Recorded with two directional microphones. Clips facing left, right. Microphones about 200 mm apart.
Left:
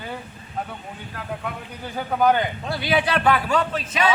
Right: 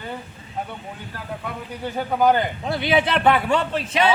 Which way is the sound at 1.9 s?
Centre (ahead or behind).